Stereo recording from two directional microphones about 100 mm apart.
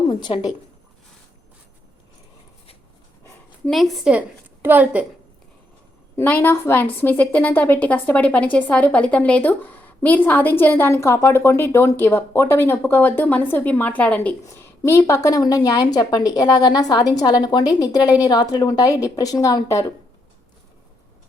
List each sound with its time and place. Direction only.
0.1 s speech: 50° left (ahead or behind)
3.7 s a woman's voice: centre (ahead or behind)
4.6 s a woman's voice: 15° right (ahead or behind)
6.1 s a woman's voice: 20° left (ahead or behind)
14.4 s a woman's voice: 25° left (ahead or behind)